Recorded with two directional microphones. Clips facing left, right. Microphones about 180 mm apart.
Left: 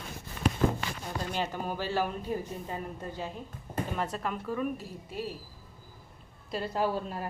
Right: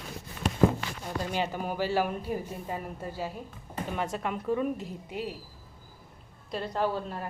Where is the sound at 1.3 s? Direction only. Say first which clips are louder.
Right 2 dB; 10° right (ahead or behind).